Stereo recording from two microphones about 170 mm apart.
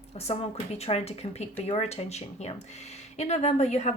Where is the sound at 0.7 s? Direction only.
35° left (ahead or behind).